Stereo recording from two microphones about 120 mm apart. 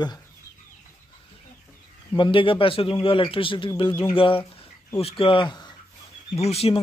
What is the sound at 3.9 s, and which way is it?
Speech, 20° left (ahead or behind).